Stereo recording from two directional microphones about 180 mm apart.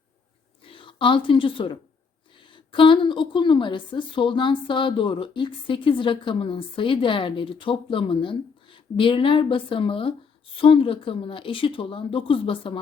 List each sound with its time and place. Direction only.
0.7 s a woman's voice: 30° left (ahead or behind)